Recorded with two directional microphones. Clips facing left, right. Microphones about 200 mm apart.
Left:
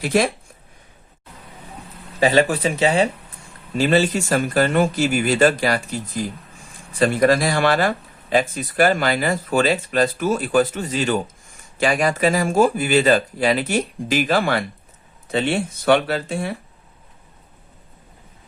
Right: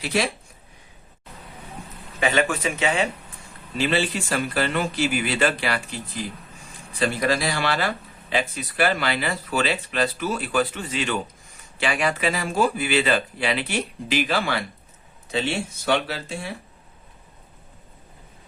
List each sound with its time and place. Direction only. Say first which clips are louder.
0.0 s speech: left 6 dB; 50° left (ahead or behind)
2.2 s speech: left 6 dB; 35° left (ahead or behind); by 16.5 s 55° left (ahead or behind)